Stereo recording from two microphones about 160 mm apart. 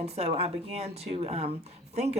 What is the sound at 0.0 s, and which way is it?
Speech, 40° right (ahead or behind).